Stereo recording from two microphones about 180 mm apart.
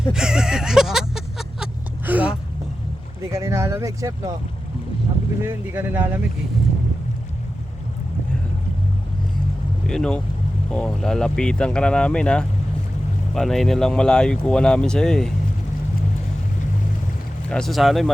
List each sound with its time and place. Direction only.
0.1 s a sound: 5° right (ahead or behind)
3.2 s vehicle: 15° right (ahead or behind)
5.4 s speech: 10° right (ahead or behind)
9.8 s speech: 5° left (ahead or behind)
17.5 s speech: centre (ahead or behind)